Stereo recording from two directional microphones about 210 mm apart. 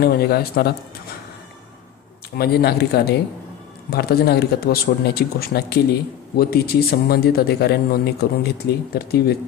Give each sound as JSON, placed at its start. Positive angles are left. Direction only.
{"t": 0.0, "sound": "a man's voice", "side_deg": 50}
{"t": 2.3, "sound": "a man's voice", "side_deg": 45}